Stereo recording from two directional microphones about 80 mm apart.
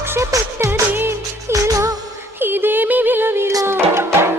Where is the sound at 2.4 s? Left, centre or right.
Right.